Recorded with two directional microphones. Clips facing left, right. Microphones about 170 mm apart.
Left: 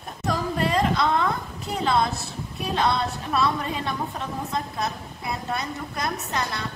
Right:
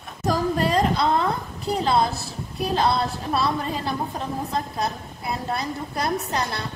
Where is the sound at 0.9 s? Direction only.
35° right (ahead or behind).